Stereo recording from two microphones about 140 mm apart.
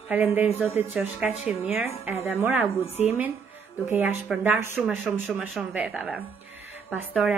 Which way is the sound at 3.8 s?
15° right (ahead or behind).